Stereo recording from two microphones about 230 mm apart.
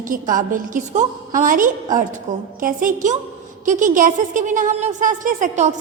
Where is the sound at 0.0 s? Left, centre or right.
Right.